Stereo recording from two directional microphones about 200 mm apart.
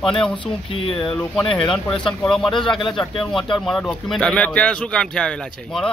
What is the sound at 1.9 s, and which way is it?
Speech, 5° left (ahead or behind).